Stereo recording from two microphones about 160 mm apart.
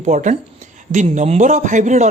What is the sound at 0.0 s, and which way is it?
Speech, 50° right (ahead or behind).